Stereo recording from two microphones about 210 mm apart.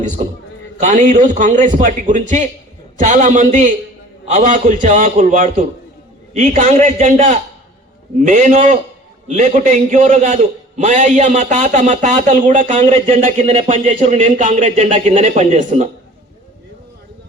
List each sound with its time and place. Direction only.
0.8 s a man's voice: 35° right (ahead or behind)